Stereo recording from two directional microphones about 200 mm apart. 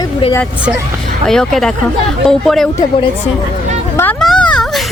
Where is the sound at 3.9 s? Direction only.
5° left (ahead or behind).